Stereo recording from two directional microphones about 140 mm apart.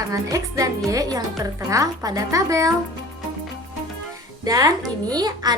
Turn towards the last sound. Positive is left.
turn(degrees=-30)  # may be behind; listen again after turning